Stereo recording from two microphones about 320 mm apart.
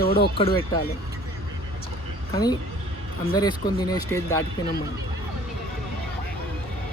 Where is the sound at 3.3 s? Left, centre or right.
Centre.